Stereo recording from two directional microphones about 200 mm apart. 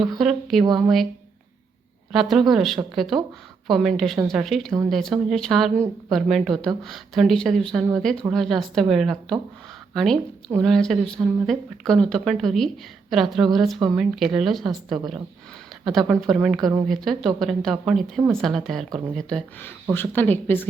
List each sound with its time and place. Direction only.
0.2 s a woman's voice: centre (ahead or behind)
2.1 s a woman's voice: centre (ahead or behind)
16.6 s speech: 20° right (ahead or behind)
16.9 s a woman's voice: centre (ahead or behind)